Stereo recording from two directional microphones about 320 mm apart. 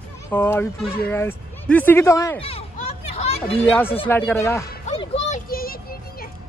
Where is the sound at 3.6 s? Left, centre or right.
Centre.